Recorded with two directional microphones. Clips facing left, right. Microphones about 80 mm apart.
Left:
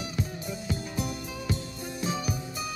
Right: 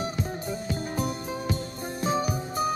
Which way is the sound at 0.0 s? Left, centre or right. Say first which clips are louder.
Right 4 dB; right.